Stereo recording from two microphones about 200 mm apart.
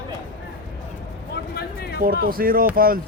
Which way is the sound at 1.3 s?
55° left (ahead or behind).